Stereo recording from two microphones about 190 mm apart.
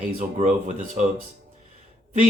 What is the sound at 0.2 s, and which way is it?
Speech, 40° right (ahead or behind).